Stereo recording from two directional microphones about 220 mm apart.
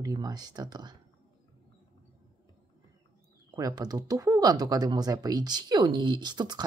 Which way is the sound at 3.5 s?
15° right (ahead or behind).